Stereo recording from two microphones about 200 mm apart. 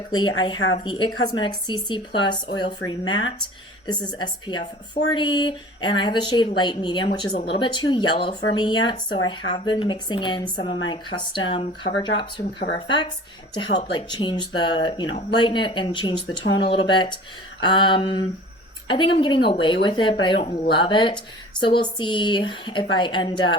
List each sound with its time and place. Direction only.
0.1 s speech: 20° left (ahead or behind)
13.5 s speech: 25° left (ahead or behind)